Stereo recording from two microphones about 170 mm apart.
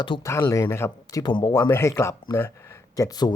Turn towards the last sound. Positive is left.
turn(degrees=20)  # may be behind; listen again after turning